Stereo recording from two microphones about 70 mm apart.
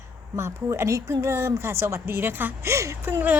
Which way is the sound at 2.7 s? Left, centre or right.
Right.